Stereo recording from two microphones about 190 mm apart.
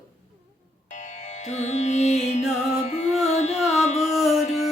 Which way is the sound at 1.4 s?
40° left (ahead or behind).